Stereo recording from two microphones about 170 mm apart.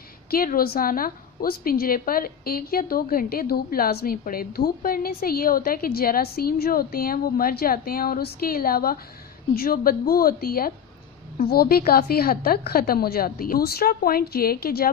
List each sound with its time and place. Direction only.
0.3 s a woman's voice: 60° left (ahead or behind)